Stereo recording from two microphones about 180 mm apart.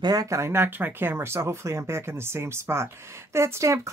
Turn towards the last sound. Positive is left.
turn(degrees=-15)  # may be behind; listen again after turning